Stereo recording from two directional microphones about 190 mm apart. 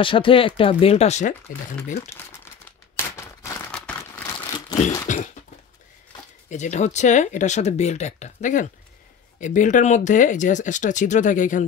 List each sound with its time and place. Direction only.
0.0 s speech: 25° left (ahead or behind)
2.0 s speech: 15° left (ahead or behind)
3.7 s crumpling: 10° left (ahead or behind)
5.0 s speech: 40° left (ahead or behind)
6.5 s speech: 40° left (ahead or behind)